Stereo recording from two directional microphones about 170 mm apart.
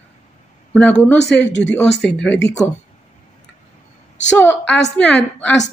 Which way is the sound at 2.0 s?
5° left (ahead or behind).